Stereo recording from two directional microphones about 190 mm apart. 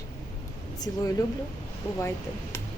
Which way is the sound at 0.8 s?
20° left (ahead or behind).